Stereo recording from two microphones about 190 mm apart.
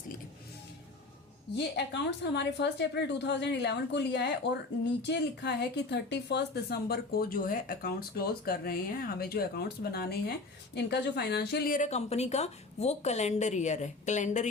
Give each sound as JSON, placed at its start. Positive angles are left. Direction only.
{"t": 1.5, "sound": "a woman's voice", "side_deg": 65}